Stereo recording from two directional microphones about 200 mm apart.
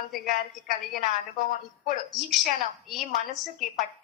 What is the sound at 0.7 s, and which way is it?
Speech, 40° right (ahead or behind).